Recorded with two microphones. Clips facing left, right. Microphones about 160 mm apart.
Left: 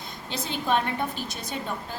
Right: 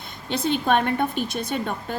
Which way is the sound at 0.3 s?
60° right (ahead or behind).